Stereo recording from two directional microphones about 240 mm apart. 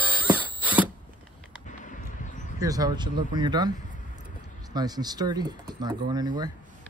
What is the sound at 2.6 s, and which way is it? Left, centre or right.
Speech, centre.